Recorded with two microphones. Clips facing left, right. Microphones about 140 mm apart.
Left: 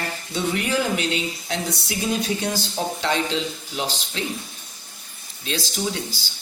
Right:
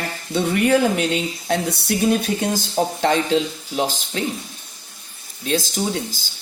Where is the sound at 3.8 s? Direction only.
45° right (ahead or behind).